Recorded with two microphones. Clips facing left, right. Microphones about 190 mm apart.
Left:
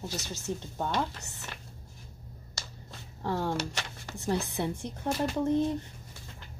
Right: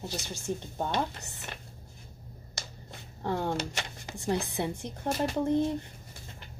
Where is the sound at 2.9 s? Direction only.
20° right (ahead or behind).